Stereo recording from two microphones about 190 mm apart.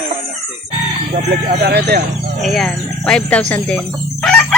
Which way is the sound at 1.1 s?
45° right (ahead or behind).